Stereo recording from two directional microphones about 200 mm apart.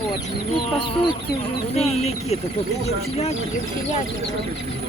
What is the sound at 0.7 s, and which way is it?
Speech, 25° left (ahead or behind).